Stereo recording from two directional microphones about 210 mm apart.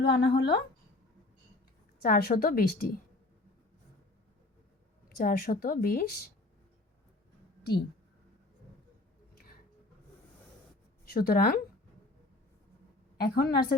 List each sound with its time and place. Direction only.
0.0 s speech: 50° left (ahead or behind)
2.0 s speech: 45° left (ahead or behind)
5.0 s speech: 45° left (ahead or behind)
11.0 s a woman's voice: 45° left (ahead or behind)
13.2 s speech: 50° left (ahead or behind)